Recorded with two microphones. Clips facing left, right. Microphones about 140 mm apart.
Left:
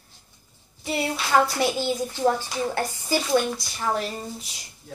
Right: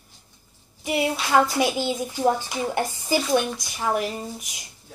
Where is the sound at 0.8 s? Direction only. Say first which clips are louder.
Right 3 dB; 15° right (ahead or behind).